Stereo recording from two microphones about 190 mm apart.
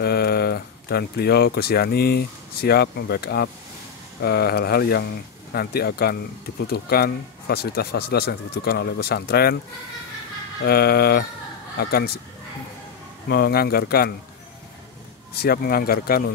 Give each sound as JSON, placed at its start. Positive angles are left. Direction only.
{"t": 0.0, "sound": "speech", "side_deg": 55}
{"t": 10.6, "sound": "speech", "side_deg": 55}
{"t": 13.3, "sound": "speech", "side_deg": 55}
{"t": 15.3, "sound": "speech", "side_deg": 55}